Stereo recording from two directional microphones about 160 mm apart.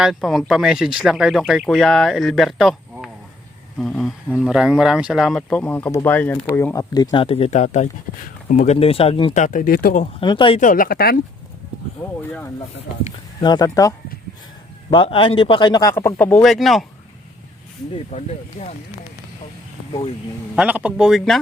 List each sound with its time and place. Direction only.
0.0 s speech: centre (ahead or behind)
6.7 s speech: 25° left (ahead or behind)
9.3 s speech: 50° left (ahead or behind)
10.2 s speech: 30° left (ahead or behind)
10.6 s speech: 55° left (ahead or behind); by 11.2 s 75° left (ahead or behind)
13.4 s speech: 25° left (ahead or behind)
14.9 s speech: 35° left (ahead or behind); by 16.5 s 10° left (ahead or behind)
16.5 s speech: centre (ahead or behind)
18.1 s speech: 45° left (ahead or behind)
20.6 s speech: 10° right (ahead or behind)